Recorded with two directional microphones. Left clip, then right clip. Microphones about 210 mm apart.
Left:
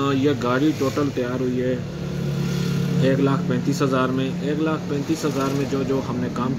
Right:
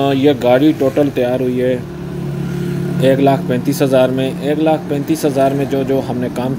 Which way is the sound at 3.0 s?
10° right (ahead or behind).